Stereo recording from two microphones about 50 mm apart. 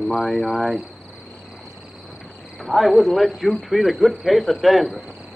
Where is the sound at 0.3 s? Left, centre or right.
Centre.